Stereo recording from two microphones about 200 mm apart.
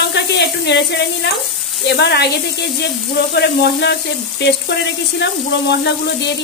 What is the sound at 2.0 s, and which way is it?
Speech, 55° left (ahead or behind).